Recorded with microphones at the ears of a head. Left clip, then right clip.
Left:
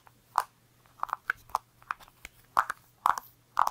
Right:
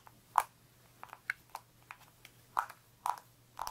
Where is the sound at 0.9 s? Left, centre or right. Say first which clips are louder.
Left 9 dB; left.